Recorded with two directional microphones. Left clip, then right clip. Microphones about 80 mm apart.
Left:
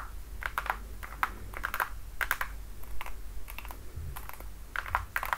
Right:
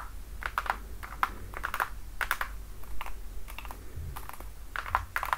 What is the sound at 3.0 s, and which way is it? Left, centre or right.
Typing, left.